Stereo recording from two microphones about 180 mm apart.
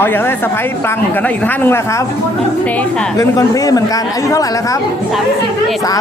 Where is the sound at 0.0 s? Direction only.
10° left (ahead or behind).